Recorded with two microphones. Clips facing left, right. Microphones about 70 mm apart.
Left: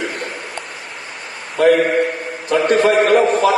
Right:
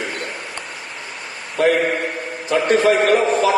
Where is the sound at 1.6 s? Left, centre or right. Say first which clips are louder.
Left 4 dB; left.